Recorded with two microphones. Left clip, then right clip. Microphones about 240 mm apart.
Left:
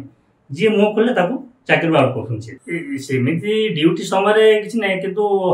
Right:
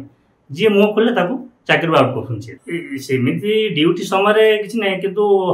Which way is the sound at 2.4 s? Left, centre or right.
Centre.